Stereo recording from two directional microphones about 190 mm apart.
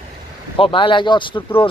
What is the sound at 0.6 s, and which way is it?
Speech, 25° left (ahead or behind).